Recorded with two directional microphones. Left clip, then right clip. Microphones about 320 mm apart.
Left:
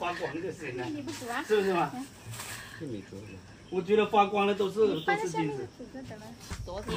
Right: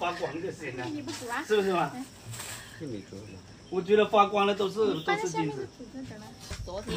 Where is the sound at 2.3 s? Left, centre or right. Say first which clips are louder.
Even; centre.